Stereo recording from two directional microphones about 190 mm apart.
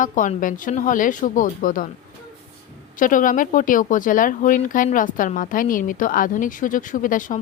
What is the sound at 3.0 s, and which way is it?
Speech, 45° left (ahead or behind).